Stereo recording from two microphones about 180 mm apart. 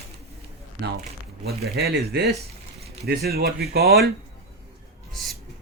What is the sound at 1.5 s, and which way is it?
A man's voice, 60° right (ahead or behind).